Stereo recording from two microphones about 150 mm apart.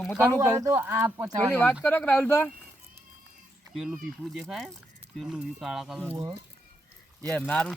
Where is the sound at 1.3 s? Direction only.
10° left (ahead or behind).